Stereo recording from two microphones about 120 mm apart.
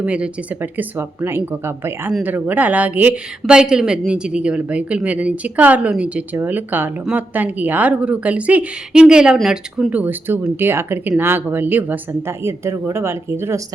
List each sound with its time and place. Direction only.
0.0 s speech: 10° right (ahead or behind)